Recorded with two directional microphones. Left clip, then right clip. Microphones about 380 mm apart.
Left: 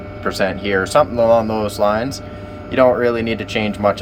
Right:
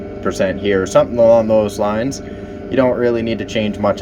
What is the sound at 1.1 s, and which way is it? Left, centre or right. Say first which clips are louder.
Speech: right 5 dB; left.